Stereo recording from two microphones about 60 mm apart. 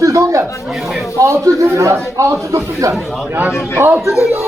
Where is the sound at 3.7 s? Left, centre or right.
Right.